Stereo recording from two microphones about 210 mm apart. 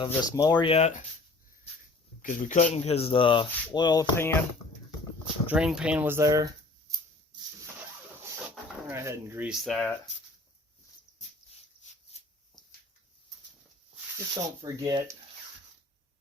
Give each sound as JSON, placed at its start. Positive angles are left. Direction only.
{"t": 0.0, "sound": "speech", "side_deg": 20}
{"t": 2.2, "sound": "speech", "side_deg": 40}
{"t": 5.5, "sound": "speech", "side_deg": -5}
{"t": 8.4, "sound": "speech", "side_deg": -10}
{"t": 14.6, "sound": "speech", "side_deg": -15}